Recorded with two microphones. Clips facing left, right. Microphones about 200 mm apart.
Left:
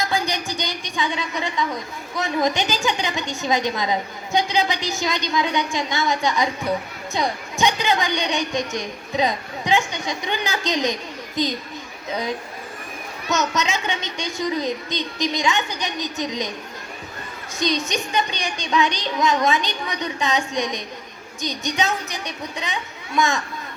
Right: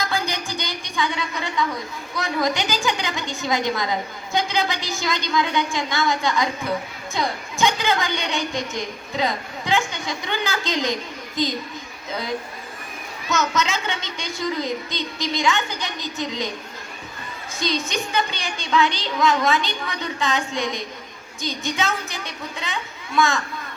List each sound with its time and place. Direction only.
0.0 s a woman's voice: 20° left (ahead or behind)
7.6 s a woman's voice: 20° left (ahead or behind)
13.3 s a woman's voice: 20° left (ahead or behind)
17.6 s child singing: 20° left (ahead or behind)
21.4 s a woman's voice: 20° left (ahead or behind)